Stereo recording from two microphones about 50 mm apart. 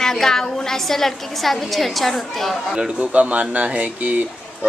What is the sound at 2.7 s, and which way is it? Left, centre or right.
Speech, centre.